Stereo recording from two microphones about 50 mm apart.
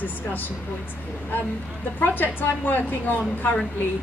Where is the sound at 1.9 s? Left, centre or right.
Left.